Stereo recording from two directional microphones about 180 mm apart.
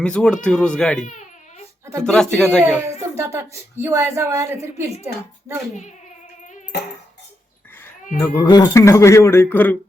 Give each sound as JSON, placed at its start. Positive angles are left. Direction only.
{"t": 0.0, "sound": "speech", "side_deg": 5}
{"t": 1.0, "sound": "baby cry", "side_deg": 40}
{"t": 2.0, "sound": "speech", "side_deg": 5}
{"t": 3.2, "sound": "a woman's voice", "side_deg": -15}
{"t": 8.2, "sound": "speech", "side_deg": 20}